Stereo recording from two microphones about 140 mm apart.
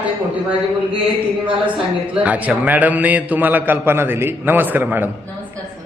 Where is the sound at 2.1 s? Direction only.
10° right (ahead or behind).